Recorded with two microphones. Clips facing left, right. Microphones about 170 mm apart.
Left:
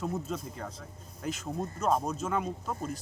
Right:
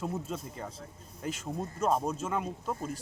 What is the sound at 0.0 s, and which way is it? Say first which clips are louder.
Speech: left 1 dB; 5° right (ahead or behind).